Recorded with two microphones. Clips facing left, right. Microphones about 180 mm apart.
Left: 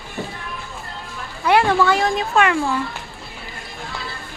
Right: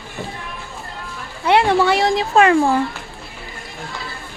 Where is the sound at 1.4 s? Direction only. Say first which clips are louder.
Right 1 dB; 25° right (ahead or behind).